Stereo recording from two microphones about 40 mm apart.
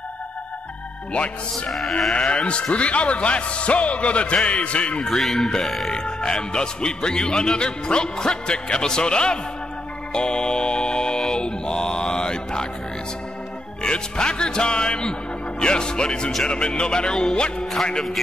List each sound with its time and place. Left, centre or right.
1.7 s speech: centre
2.1 s speech: left
5.0 s speech: centre
5.9 s speech: left
10.1 s mantra: left
13.8 s speech: left